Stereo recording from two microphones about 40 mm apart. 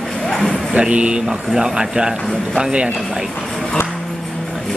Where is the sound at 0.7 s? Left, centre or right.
Right.